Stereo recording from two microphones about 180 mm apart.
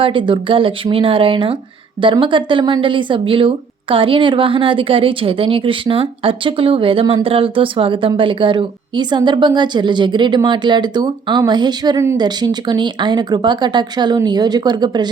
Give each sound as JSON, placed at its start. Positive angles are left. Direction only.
{"t": 0.0, "sound": "speech", "side_deg": -30}